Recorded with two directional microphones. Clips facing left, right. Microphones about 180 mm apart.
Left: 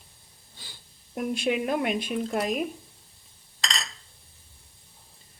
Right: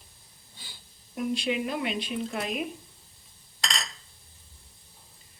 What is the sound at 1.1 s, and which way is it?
Speech, 50° left (ahead or behind).